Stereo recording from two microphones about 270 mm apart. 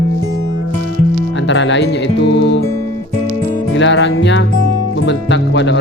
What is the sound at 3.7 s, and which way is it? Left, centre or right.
Speech, left.